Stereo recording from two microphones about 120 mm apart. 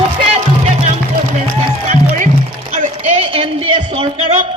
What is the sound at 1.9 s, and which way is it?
Music, 90° right.